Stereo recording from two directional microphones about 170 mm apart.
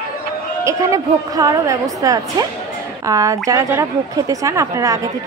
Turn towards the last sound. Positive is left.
turn(degrees=-20)  # may be behind; listen again after turning